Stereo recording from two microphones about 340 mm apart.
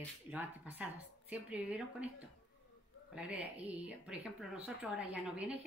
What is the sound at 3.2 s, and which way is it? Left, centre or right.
A woman's voice, centre.